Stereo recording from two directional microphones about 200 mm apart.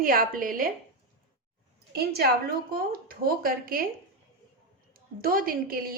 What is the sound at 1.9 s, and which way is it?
A woman's voice, 50° right (ahead or behind).